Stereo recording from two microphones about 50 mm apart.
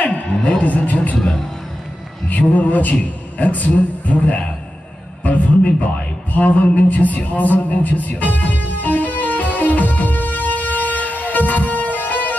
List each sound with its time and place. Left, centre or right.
0.0 s speech: left
2.2 s a man's voice: left
6.3 s a sound: left